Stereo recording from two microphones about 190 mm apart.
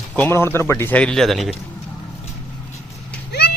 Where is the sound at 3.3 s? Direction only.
60° left (ahead or behind).